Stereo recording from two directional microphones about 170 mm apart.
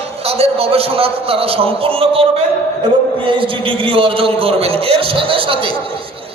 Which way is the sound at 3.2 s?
30° right (ahead or behind).